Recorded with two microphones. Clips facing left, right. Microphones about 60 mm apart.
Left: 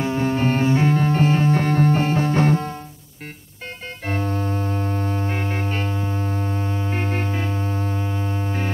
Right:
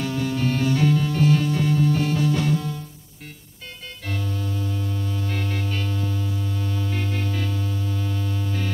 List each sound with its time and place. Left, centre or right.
0.0 s music: left
4.0 s music: left